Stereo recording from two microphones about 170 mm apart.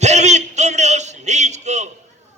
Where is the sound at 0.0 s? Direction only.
40° right (ahead or behind).